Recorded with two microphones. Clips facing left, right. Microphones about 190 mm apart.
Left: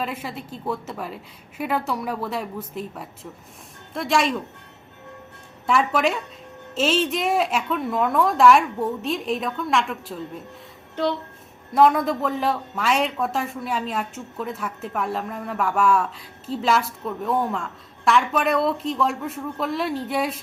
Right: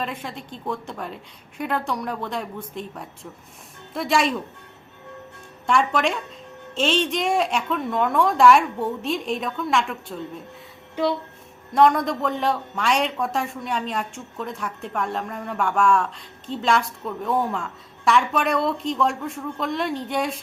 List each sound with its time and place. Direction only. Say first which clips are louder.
0.0 s speech: left 1 dB; 5° left (ahead or behind)
5.6 s speech: even; 5° left (ahead or behind)
11.7 s speech: even; 5° left (ahead or behind)